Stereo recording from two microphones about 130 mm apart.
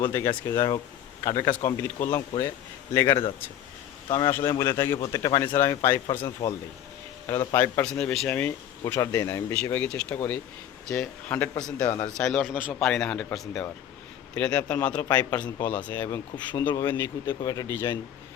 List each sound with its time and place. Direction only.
0.0 s speech: 20° left (ahead or behind)
4.3 s speech: 20° left (ahead or behind)
8.8 s speech: 20° left (ahead or behind)
9.7 s speech: 10° left (ahead or behind)
16.0 s speech: 25° left (ahead or behind)
17.4 s speech: 30° left (ahead or behind)
17.7 s speech: 15° left (ahead or behind)